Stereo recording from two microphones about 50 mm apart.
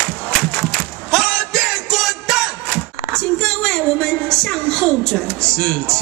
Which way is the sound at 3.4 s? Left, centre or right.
Centre.